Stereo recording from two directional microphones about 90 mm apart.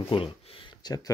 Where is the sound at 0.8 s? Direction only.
45° left (ahead or behind).